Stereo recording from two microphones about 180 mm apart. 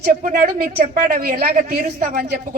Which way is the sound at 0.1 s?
60° right (ahead or behind).